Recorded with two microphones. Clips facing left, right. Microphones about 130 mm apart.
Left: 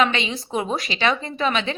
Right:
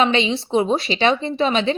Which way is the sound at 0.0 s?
30° right (ahead or behind).